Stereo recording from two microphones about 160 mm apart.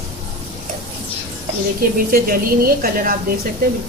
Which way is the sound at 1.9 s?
65° right (ahead or behind).